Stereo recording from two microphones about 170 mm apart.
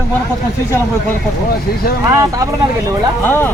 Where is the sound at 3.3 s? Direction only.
10° left (ahead or behind).